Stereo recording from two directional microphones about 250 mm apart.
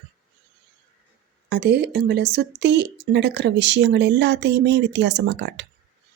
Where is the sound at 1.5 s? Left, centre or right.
Right.